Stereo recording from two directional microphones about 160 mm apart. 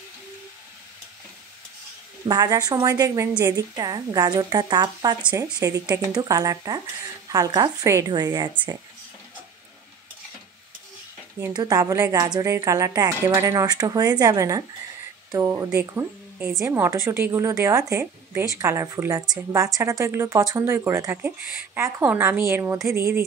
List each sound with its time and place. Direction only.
2.2 s a woman's voice: 25° right (ahead or behind)
11.5 s a woman's voice: 25° right (ahead or behind)